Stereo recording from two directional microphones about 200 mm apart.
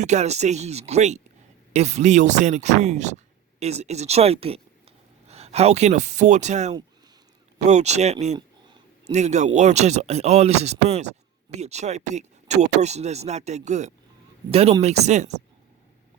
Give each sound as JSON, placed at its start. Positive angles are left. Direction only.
{"t": 0.0, "sound": "speech", "side_deg": -35}
{"t": 8.4, "sound": "a sound", "side_deg": -20}
{"t": 9.1, "sound": "speech", "side_deg": -35}